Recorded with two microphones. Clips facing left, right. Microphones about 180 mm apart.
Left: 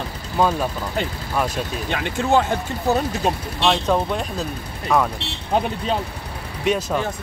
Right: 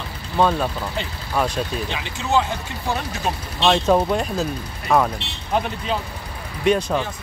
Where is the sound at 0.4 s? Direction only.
10° left (ahead or behind).